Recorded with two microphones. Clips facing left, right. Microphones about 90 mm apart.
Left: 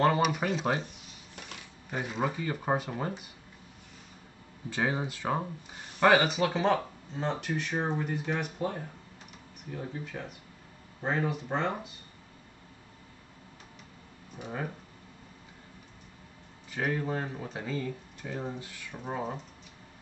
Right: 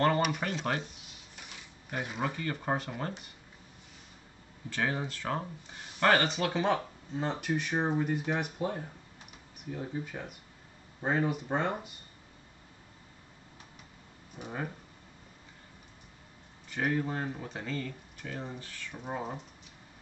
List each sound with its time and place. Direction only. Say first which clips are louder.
0.0 s speech: left 2 dB; 5° left (ahead or behind)
1.9 s speech: left 2 dB; centre (ahead or behind)
4.6 s speech: left 2 dB; 15° left (ahead or behind); by 7.5 s 5° right (ahead or behind)
7.7 s speech: right 2 dB; 20° right (ahead or behind)
11.0 s speech: right 1 dB; 10° right (ahead or behind)
14.4 s speech: left 1 dB; 5° right (ahead or behind)
16.7 s speech: even; centre (ahead or behind)
19.0 s speech: left 2 dB; centre (ahead or behind)